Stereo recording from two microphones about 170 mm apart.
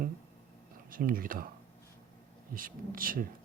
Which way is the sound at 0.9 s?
55° right (ahead or behind).